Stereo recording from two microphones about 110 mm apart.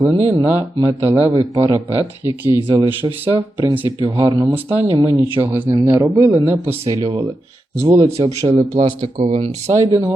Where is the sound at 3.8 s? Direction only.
50° right (ahead or behind).